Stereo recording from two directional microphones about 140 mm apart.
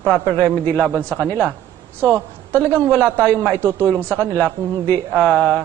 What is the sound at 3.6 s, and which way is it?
Speech, 15° right (ahead or behind).